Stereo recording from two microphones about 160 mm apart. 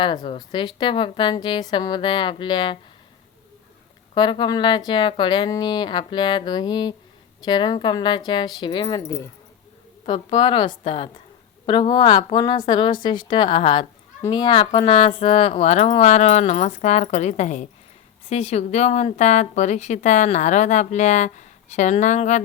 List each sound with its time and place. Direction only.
0.3 s speech: 30° left (ahead or behind)
4.1 s speech: 30° left (ahead or behind)
10.1 s a woman's voice: 35° left (ahead or behind)